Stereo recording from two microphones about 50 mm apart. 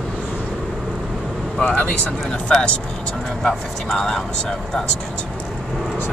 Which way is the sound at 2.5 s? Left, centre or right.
Left.